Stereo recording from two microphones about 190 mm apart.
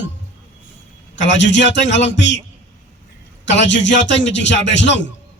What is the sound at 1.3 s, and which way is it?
A man's voice, 70° left (ahead or behind).